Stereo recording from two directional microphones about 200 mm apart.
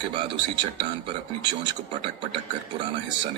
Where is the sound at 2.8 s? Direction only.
25° right (ahead or behind).